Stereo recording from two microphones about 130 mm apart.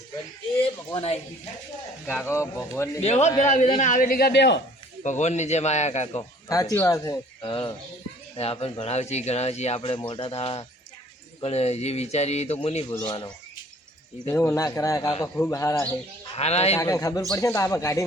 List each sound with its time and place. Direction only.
0.9 s speech: 50° left (ahead or behind)
2.0 s speech: 15° left (ahead or behind)
3.0 s speech: 60° left (ahead or behind)
3.8 s speech: 80° left
5.0 s speech: 65° left (ahead or behind)
6.5 s speech: 25° left (ahead or behind)
7.4 s speech: 45° left (ahead or behind)
10.0 s speech: 40° left (ahead or behind)
13.1 s speech: 35° left (ahead or behind)
14.3 s speech: 20° left (ahead or behind)
16.2 s speech: 50° left (ahead or behind)
16.8 s speech: 25° left (ahead or behind)